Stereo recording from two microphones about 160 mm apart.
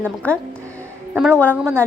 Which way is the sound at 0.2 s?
10° left (ahead or behind).